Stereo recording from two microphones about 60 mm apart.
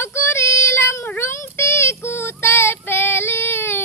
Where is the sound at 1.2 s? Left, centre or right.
Left.